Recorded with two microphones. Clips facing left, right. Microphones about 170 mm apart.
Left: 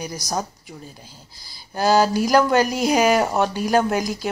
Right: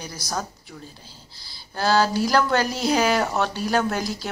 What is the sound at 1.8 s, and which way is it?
Speech, 15° left (ahead or behind).